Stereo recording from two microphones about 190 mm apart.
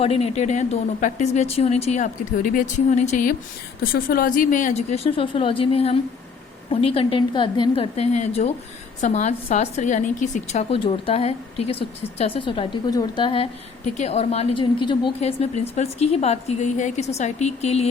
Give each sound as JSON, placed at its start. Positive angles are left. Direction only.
{"t": 0.0, "sound": "a woman's voice", "side_deg": 30}